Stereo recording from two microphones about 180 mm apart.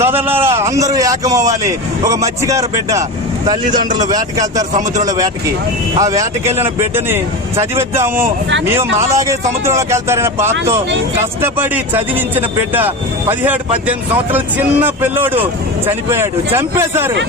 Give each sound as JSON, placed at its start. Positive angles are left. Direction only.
{"t": 0.0, "sound": "speech", "side_deg": -10}
{"t": 4.1, "sound": "speech", "side_deg": -20}
{"t": 11.3, "sound": "speech", "side_deg": -10}